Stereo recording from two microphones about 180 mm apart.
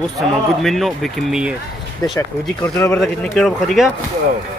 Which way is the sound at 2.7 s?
15° left (ahead or behind).